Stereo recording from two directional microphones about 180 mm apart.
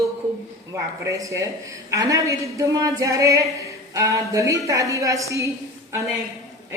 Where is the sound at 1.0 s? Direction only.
15° right (ahead or behind).